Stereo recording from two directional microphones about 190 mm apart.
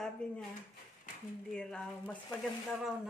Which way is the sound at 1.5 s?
5° left (ahead or behind).